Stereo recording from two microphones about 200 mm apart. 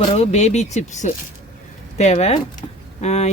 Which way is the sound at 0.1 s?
35° left (ahead or behind).